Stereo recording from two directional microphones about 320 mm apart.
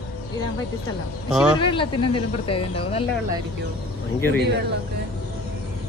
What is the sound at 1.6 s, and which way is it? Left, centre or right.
Speech, centre.